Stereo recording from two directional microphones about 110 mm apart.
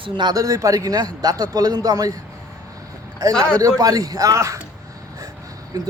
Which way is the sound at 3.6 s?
35° right (ahead or behind).